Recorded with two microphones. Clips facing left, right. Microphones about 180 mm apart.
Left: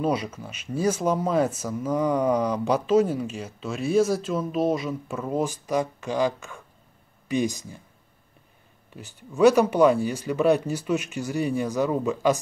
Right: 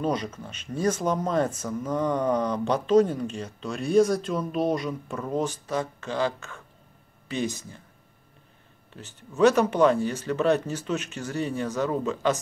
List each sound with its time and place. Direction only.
0.0 s speech: 10° left (ahead or behind)
8.9 s speech: 10° left (ahead or behind)